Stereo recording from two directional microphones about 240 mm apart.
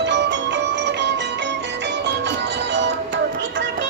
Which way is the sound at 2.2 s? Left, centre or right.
Right.